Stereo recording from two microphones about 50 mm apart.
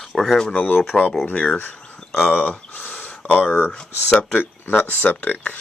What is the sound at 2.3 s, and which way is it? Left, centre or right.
Speech, left.